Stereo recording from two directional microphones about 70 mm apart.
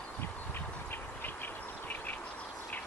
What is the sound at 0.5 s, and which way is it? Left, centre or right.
Insect, left.